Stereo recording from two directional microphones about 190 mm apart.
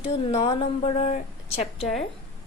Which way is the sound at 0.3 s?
30° left (ahead or behind).